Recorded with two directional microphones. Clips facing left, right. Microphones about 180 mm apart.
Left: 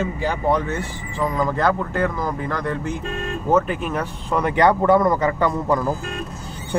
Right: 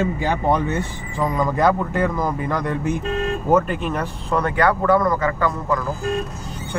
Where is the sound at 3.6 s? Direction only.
5° left (ahead or behind).